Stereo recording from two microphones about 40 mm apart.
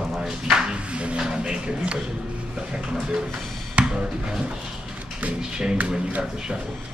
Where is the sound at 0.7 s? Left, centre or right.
Right.